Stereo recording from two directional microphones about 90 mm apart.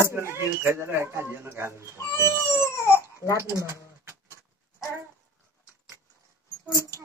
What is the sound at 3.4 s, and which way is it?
Speech, 35° right (ahead or behind).